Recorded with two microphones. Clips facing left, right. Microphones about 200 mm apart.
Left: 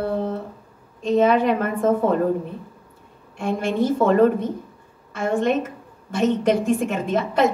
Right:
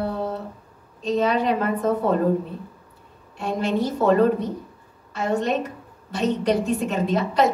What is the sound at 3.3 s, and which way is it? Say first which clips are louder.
A woman's voice: left 1 dB; 50° left (ahead or behind).